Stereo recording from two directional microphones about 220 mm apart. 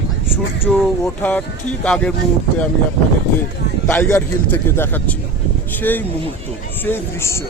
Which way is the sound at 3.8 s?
10° left (ahead or behind).